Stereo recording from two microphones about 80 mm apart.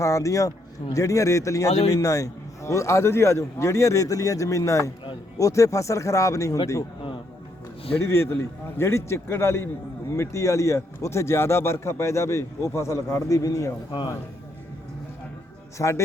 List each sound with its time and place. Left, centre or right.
0.0 s a man's voice: left
8.0 s a man's voice: left
15.8 s a man's voice: left